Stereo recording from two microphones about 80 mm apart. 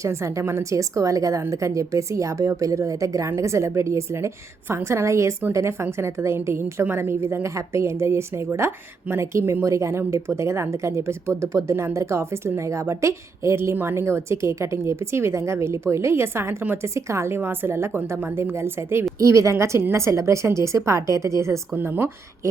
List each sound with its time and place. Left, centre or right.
0.0 s speech: right